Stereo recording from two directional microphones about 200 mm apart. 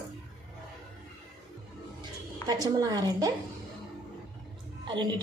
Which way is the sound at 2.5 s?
20° right (ahead or behind).